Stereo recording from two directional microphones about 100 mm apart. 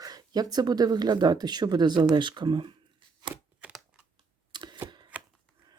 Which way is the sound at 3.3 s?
15° right (ahead or behind).